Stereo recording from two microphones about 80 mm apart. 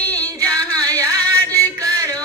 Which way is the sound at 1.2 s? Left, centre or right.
Left.